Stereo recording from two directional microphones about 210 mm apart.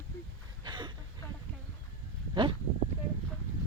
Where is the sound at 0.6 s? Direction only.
20° right (ahead or behind).